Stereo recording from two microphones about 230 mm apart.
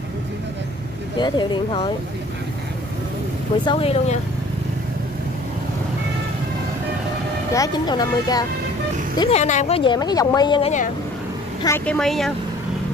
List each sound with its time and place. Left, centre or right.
1.1 s speech: centre
3.6 s speech: left
7.5 s speech: centre
9.4 s speech: left
11.6 s a woman's voice: centre